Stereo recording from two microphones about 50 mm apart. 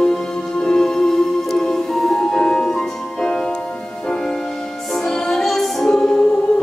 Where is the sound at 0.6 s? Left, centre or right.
Centre.